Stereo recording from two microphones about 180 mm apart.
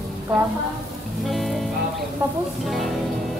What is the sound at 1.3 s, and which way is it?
Music, centre (ahead or behind).